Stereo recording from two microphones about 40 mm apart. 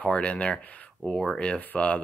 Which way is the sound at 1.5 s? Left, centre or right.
Left.